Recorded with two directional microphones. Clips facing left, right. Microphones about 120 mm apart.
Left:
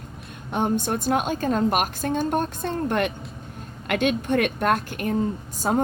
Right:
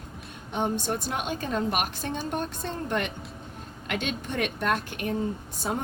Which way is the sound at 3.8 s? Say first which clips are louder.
Left 9 dB; 55° left (ahead or behind).